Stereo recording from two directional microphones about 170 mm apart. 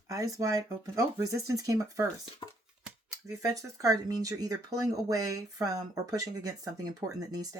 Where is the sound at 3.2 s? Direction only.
20° right (ahead or behind).